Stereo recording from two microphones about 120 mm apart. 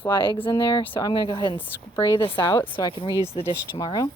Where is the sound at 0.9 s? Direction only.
25° left (ahead or behind).